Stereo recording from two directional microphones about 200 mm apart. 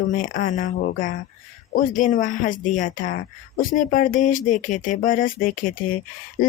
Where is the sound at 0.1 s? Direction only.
40° left (ahead or behind).